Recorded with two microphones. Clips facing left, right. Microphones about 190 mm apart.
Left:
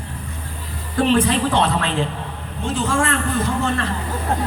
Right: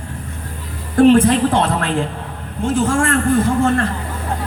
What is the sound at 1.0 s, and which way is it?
Speech, 50° right (ahead or behind).